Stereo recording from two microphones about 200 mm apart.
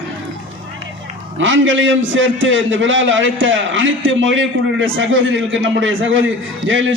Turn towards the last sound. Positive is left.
turn(degrees=-70)  # may be behind; listen again after turning